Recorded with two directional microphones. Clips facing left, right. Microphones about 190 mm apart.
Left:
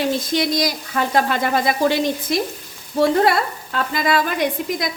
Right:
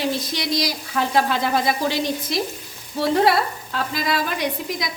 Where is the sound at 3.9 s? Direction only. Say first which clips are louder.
Left 5 dB; 55° left (ahead or behind).